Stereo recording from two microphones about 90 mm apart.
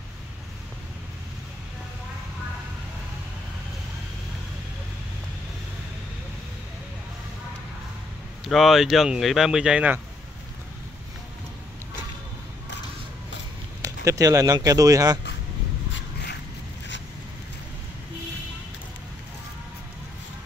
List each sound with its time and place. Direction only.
8.5 s speech: centre (ahead or behind)
13.8 s speech: 40° right (ahead or behind)